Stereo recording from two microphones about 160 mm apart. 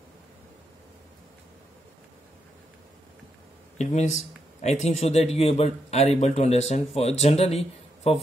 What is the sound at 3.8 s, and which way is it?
A man's voice, 45° left (ahead or behind).